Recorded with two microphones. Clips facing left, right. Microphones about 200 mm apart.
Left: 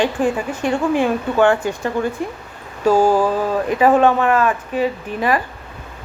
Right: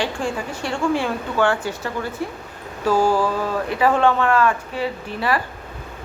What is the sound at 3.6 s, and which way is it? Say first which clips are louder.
A woman's voice: left 4 dB; 20° left (ahead or behind).